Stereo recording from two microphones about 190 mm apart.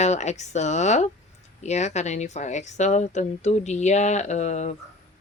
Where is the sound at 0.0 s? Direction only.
35° left (ahead or behind).